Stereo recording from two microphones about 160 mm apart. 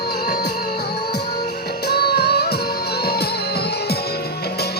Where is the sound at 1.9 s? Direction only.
80° left.